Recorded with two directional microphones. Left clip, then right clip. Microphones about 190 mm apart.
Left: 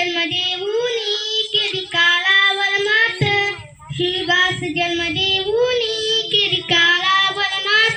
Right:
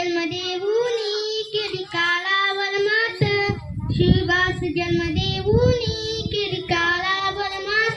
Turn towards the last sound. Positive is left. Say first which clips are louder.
# left 6 dB
turn(degrees=0)  # may be behind; listen again after turning